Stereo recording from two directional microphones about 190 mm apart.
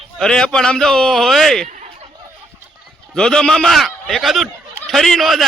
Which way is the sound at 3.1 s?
5° left (ahead or behind).